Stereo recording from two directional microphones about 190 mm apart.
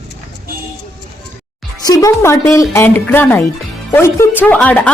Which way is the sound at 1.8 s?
20° left (ahead or behind).